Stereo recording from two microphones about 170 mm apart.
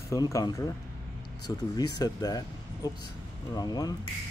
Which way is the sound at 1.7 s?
20° left (ahead or behind).